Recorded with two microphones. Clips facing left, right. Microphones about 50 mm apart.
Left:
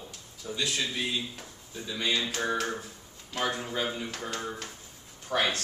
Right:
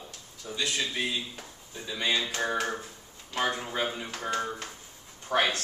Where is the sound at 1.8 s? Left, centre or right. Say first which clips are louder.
Right 1 dB; centre.